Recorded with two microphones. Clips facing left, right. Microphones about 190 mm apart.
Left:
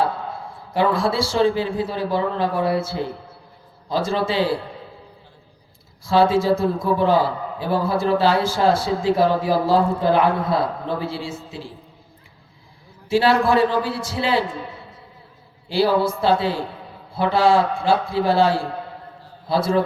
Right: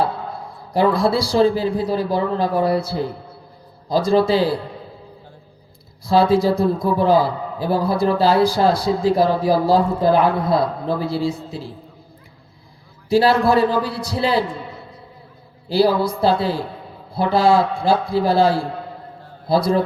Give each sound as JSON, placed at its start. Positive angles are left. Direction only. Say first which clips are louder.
{"t": 0.7, "sound": "speech", "louder": "right 3 dB", "side_deg": -35}
{"t": 6.1, "sound": "speech", "louder": "right 1 dB", "side_deg": -35}
{"t": 13.1, "sound": "speech", "louder": "right 2 dB", "side_deg": -35}
{"t": 15.7, "sound": "speech", "louder": "right 2 dB", "side_deg": -35}